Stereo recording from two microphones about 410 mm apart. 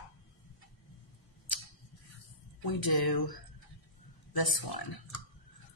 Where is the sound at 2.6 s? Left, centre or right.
Left.